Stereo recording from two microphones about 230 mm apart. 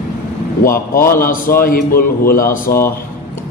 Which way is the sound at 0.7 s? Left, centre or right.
Left.